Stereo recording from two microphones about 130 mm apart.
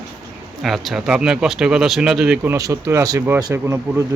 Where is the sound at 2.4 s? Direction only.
20° right (ahead or behind).